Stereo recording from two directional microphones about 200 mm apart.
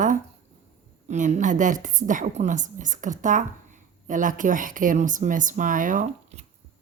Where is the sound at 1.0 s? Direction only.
35° right (ahead or behind).